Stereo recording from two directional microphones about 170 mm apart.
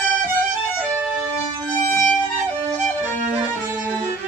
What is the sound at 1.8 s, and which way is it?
Violin, 15° left (ahead or behind).